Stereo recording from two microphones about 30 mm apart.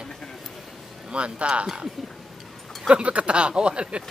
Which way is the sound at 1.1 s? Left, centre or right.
Right.